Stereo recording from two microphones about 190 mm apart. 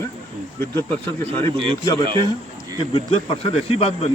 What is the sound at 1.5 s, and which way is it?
Speech, 30° right (ahead or behind).